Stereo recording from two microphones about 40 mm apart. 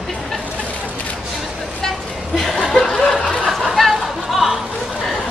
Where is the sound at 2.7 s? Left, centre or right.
Centre.